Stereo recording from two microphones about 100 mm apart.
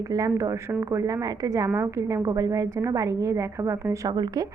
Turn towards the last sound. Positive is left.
turn(degrees=-40)  # may be behind; listen again after turning